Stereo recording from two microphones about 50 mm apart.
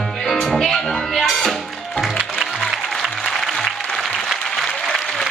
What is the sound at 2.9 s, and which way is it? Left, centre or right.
Applause, centre.